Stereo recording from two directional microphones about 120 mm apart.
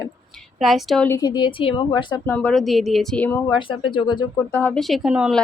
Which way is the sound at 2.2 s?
10° left (ahead or behind).